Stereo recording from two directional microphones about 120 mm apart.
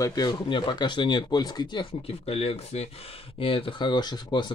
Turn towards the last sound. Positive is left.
turn(degrees=40)  # may be behind; listen again after turning